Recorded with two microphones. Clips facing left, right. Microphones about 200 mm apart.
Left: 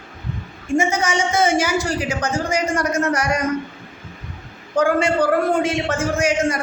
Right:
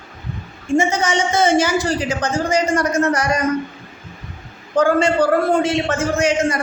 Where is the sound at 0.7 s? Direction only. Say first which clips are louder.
Right 2 dB; 30° right (ahead or behind).